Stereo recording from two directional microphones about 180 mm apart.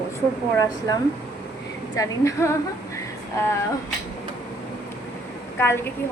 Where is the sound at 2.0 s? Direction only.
20° left (ahead or behind).